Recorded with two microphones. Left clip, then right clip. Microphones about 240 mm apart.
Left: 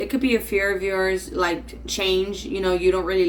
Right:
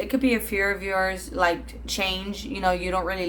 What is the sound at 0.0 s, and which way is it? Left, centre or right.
Speech, centre.